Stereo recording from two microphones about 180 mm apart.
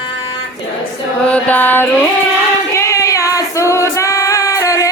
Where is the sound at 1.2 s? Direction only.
5° left (ahead or behind).